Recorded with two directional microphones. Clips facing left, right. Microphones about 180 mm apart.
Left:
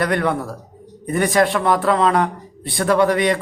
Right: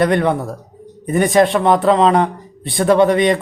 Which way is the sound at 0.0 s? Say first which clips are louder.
Right 4 dB; 25° right (ahead or behind).